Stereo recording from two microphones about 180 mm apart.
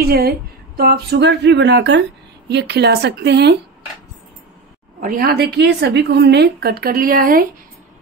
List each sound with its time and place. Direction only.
0.0 s a woman's voice: 60° right (ahead or behind)
5.0 s a woman's voice: 55° right (ahead or behind)